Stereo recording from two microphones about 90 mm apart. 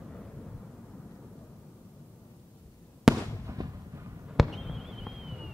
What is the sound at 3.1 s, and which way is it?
Fireworks, 5° right (ahead or behind).